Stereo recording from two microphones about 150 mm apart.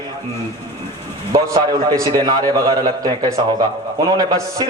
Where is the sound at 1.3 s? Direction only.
25° right (ahead or behind).